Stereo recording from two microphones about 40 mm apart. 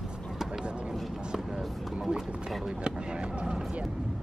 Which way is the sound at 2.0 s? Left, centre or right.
Centre.